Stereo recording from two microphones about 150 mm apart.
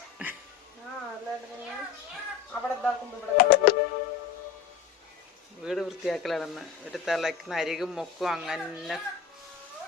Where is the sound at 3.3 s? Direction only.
90° left.